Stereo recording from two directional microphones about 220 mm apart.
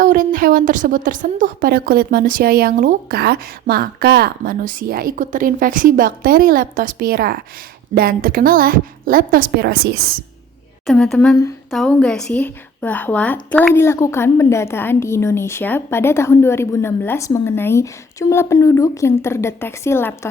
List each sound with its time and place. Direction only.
0.0 s a woman's voice: 40° right (ahead or behind)
10.8 s a woman's voice: centre (ahead or behind)